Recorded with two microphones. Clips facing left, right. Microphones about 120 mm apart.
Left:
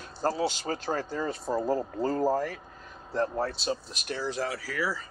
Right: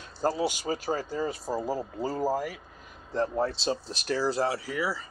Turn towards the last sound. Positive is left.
turn(degrees=-15)  # may be behind; listen again after turning